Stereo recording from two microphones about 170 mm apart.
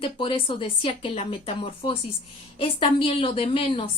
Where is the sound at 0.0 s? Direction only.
30° left (ahead or behind).